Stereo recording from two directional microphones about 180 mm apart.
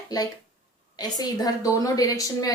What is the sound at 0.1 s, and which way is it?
A woman's voice, 20° left (ahead or behind).